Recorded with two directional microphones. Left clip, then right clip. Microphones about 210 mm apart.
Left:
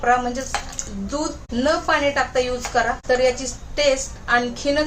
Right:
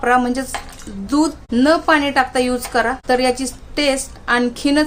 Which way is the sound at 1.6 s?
50° right (ahead or behind).